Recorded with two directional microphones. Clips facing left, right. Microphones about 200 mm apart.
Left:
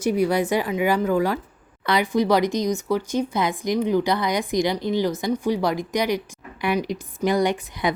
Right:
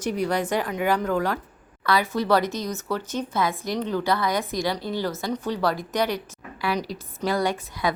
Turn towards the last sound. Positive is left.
turn(degrees=20)  # may be behind; listen again after turning